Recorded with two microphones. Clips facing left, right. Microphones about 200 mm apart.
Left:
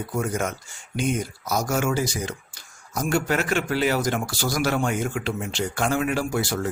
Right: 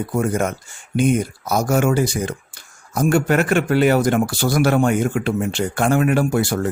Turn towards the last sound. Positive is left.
turn(degrees=-55)  # may be behind; listen again after turning